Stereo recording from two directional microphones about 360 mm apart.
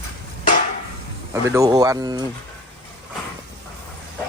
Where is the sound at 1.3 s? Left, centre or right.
Centre.